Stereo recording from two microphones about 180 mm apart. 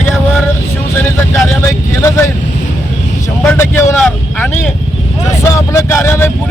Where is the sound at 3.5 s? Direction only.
15° left (ahead or behind).